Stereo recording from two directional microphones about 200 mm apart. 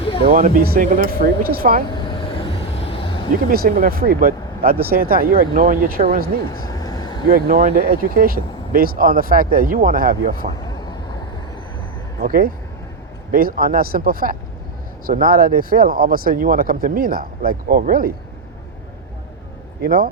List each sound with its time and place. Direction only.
0.2 s speech: 45° right (ahead or behind)
1.9 s vehicle: 25° left (ahead or behind)
3.4 s speech: 45° right (ahead or behind)
6.5 s vehicle: 20° left (ahead or behind)
7.3 s speech: 45° right (ahead or behind)
12.2 s speech: 45° right (ahead or behind)
19.8 s speech: 45° right (ahead or behind)